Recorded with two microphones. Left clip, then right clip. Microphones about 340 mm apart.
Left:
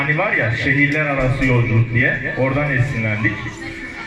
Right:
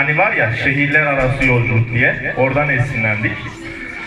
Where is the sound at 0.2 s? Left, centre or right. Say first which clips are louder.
Right 3 dB; right.